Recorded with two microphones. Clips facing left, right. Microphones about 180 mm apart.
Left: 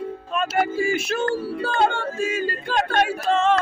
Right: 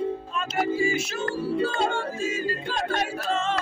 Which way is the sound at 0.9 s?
60° left (ahead or behind).